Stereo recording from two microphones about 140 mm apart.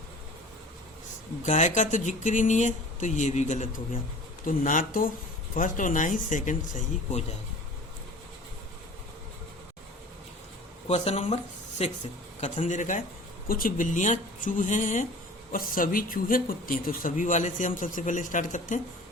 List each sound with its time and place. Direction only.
1.4 s speech: 60° left (ahead or behind)
10.8 s speech: 50° left (ahead or behind)
12.4 s speech: 60° left (ahead or behind)
13.5 s speech: 85° left; by 15.0 s 65° left (ahead or behind)
15.5 s speech: 85° left; by 18.8 s 65° left (ahead or behind)